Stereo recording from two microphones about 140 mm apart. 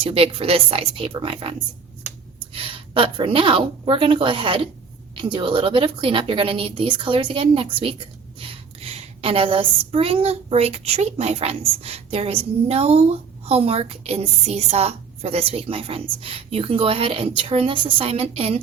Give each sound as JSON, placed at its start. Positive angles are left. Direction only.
{"t": 0.0, "sound": "a woman's voice", "side_deg": -40}